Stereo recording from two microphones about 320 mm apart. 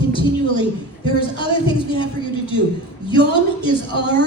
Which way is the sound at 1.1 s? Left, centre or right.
Centre.